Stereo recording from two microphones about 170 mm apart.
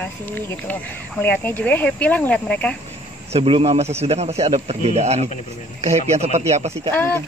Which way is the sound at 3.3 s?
35° right (ahead or behind).